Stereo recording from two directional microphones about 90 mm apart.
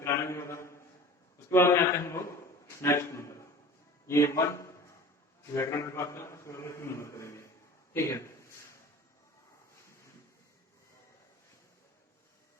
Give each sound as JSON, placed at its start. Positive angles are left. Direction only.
{"t": 0.0, "sound": "a sound", "side_deg": 35}
{"t": 1.5, "sound": "a man's voice", "side_deg": 30}
{"t": 5.7, "sound": "a man's voice", "side_deg": 35}